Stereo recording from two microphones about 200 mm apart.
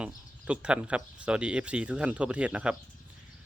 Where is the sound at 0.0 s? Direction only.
5° right (ahead or behind).